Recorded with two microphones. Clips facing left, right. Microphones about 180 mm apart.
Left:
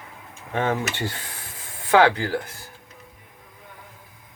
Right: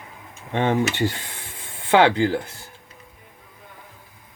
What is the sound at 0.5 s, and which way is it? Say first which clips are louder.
Speech: right 3 dB; 25° right (ahead or behind).